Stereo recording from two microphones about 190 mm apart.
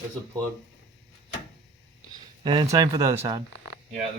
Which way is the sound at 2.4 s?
25° right (ahead or behind).